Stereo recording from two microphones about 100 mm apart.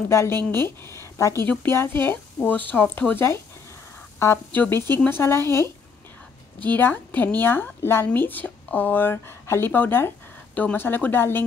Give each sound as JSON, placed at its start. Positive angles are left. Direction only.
{"t": 0.1, "sound": "a woman's voice", "side_deg": 25}
{"t": 4.6, "sound": "a woman's voice", "side_deg": 20}